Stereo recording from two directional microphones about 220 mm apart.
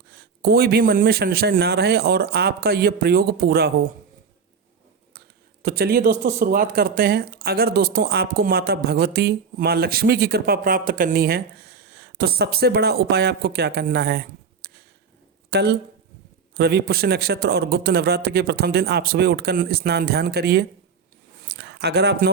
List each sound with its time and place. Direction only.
0.1 s speech: 45° right (ahead or behind)
5.6 s speech: 45° right (ahead or behind)
21.5 s a sound: 50° right (ahead or behind)